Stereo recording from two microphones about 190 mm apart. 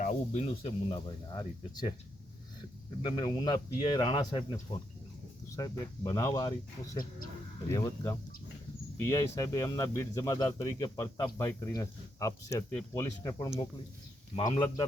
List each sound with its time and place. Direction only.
0.0 s speech: 40° left (ahead or behind); by 1.9 s 20° left (ahead or behind)
3.0 s speech: 25° left (ahead or behind)